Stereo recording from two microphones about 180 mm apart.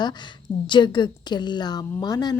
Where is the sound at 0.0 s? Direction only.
25° left (ahead or behind).